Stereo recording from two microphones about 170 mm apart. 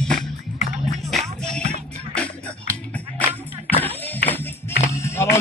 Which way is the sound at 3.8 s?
10° left (ahead or behind).